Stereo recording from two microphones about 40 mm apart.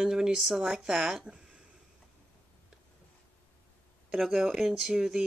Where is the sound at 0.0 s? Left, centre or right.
Centre.